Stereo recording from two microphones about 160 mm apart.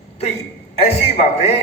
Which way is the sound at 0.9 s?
45° left (ahead or behind).